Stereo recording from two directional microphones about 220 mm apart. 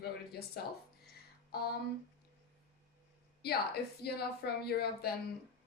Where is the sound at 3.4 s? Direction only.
45° left (ahead or behind).